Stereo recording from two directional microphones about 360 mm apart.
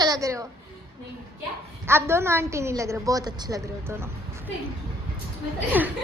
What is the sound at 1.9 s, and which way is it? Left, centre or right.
A woman's voice, centre.